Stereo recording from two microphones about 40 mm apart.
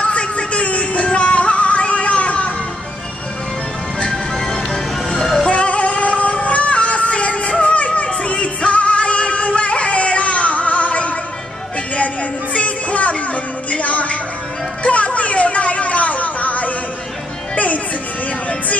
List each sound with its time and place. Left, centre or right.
0.0 s music: left
5.1 s music: centre
5.5 s music: left
12.5 s music: left
14.8 s a sound: left